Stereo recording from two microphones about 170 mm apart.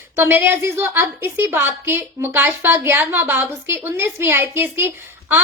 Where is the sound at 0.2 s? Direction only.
10° right (ahead or behind).